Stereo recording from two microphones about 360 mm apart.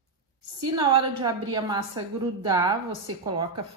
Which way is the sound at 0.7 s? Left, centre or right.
Centre.